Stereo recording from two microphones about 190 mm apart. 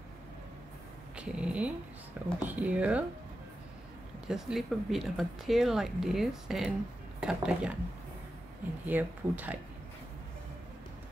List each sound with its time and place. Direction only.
1.1 s speech: 5° right (ahead or behind)
4.3 s speech: centre (ahead or behind)
8.8 s speech: 10° right (ahead or behind)